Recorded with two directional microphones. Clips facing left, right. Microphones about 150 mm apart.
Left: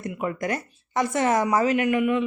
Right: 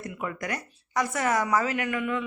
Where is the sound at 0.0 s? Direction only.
25° left (ahead or behind).